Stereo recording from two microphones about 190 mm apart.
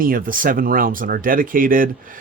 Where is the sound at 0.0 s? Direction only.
45° right (ahead or behind).